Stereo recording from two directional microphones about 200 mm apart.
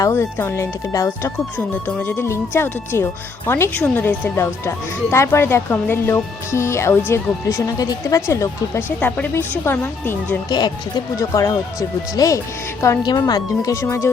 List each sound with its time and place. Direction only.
0.0 s speech: 15° left (ahead or behind)
10.5 s speech: 20° left (ahead or behind)